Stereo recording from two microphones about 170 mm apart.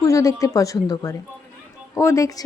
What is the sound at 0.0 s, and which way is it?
A woman's voice, 20° left (ahead or behind).